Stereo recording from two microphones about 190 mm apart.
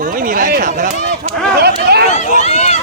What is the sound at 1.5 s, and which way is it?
Speech, 55° right (ahead or behind).